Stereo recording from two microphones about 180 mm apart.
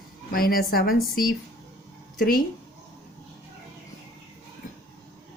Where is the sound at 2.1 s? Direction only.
50° left (ahead or behind).